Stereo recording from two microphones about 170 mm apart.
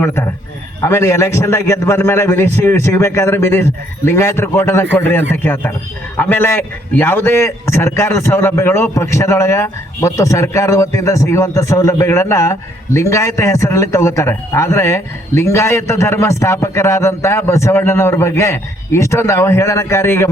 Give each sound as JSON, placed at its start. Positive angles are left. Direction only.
{"t": 0.0, "sound": "a man's voice", "side_deg": 15}